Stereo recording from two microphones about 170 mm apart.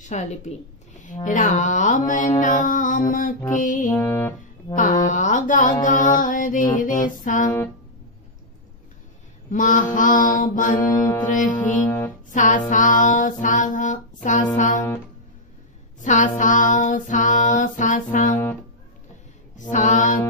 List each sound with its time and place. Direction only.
0.0 s a woman's voice: 45° left (ahead or behind)
1.0 s music: 50° left (ahead or behind)
3.9 s music: 15° left (ahead or behind)
5.0 s music: 45° left (ahead or behind)
9.5 s music: 50° left (ahead or behind)
10.9 s music: 20° left (ahead or behind)
11.2 s music: 50° left (ahead or behind)
16.0 s music: 50° left (ahead or behind)
19.7 s music: 45° left (ahead or behind)